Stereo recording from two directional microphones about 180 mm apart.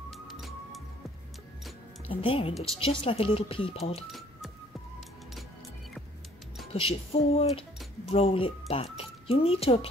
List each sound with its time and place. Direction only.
0.3 s music: centre (ahead or behind)
2.0 s speech: 30° left (ahead or behind)
6.7 s speech: 35° left (ahead or behind)